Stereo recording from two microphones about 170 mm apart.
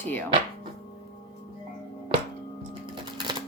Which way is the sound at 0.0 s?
10° left (ahead or behind).